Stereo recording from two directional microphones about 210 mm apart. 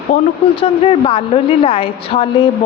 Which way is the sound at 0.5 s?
25° left (ahead or behind).